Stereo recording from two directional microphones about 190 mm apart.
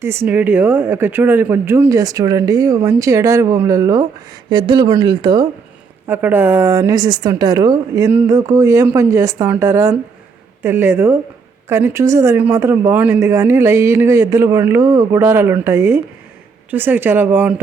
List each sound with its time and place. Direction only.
0.0 s speech: 15° right (ahead or behind)
6.1 s speech: 10° right (ahead or behind)